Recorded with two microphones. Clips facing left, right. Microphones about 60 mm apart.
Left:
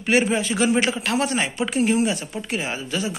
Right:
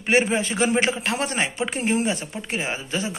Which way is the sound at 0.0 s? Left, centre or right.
Right.